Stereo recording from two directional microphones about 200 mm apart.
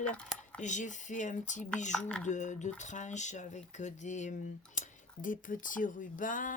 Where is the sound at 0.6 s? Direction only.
40° left (ahead or behind).